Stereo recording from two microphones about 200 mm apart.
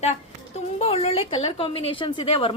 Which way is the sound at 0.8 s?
30° left (ahead or behind).